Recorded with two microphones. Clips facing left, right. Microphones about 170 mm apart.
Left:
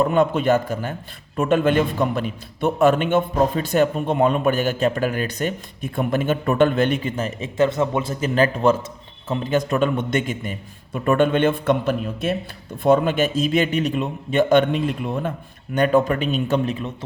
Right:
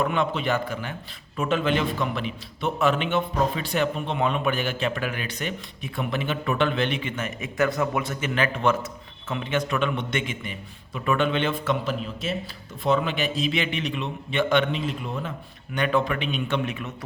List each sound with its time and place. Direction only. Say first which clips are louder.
0.0 s speech: left 7 dB; 45° left (ahead or behind)
15.7 s speech: left 6 dB; 45° left (ahead or behind)